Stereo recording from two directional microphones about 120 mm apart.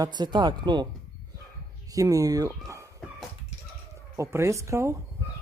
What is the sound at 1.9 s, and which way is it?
Speech, 30° right (ahead or behind).